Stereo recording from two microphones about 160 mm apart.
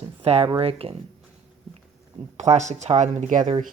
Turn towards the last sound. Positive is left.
turn(degrees=-50)  # may be behind; listen again after turning